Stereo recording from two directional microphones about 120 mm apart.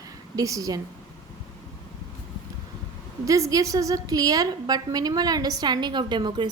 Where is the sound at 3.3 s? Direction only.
30° right (ahead or behind).